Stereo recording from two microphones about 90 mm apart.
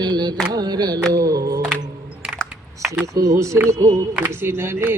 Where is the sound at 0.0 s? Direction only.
50° right (ahead or behind).